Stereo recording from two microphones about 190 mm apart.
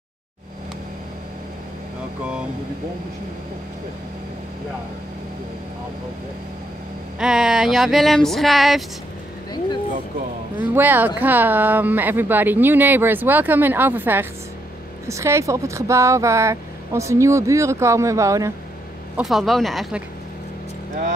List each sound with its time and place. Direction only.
7.2 s speech: 5° right (ahead or behind)
10.6 s speech: 10° right (ahead or behind)
19.1 s speech: centre (ahead or behind)